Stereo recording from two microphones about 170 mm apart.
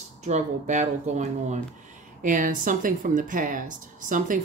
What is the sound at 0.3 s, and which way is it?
Speech, 45° right (ahead or behind).